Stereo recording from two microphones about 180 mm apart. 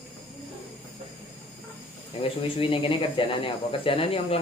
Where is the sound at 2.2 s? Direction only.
30° left (ahead or behind).